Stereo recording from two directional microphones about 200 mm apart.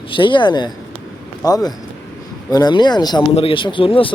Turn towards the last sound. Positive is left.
turn(degrees=25)  # may be behind; listen again after turning